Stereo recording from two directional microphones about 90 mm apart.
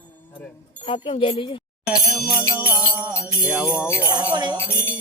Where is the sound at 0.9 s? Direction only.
80° left.